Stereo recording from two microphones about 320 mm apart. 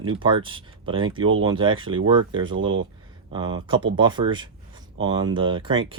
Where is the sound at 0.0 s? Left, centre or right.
Centre.